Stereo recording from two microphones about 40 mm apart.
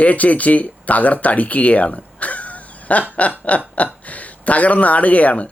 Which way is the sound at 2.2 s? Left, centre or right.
Left.